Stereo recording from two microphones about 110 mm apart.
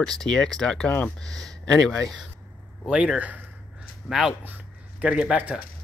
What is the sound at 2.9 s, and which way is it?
Speech, 10° right (ahead or behind).